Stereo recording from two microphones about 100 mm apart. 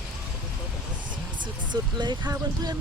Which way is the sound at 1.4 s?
45° right (ahead or behind).